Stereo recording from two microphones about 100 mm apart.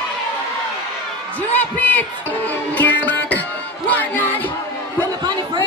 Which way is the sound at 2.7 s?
15° left (ahead or behind).